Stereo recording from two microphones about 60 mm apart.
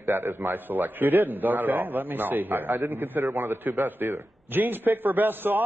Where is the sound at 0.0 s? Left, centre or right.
Right.